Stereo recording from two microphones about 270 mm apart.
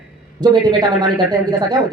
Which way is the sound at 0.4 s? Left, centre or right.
Centre.